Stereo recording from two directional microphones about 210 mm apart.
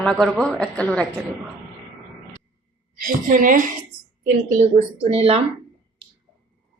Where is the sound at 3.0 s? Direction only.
40° right (ahead or behind).